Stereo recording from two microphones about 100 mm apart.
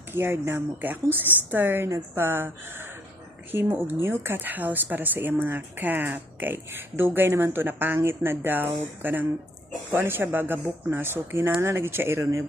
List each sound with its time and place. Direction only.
0.1 s speech: 25° right (ahead or behind)